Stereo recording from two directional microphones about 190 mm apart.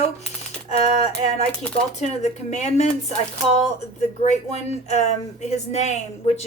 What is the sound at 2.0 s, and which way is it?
Speech, 35° left (ahead or behind).